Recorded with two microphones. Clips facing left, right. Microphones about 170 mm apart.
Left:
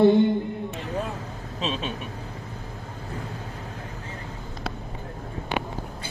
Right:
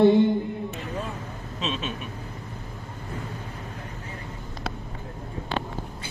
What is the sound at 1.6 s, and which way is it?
Vehicle, 35° left (ahead or behind).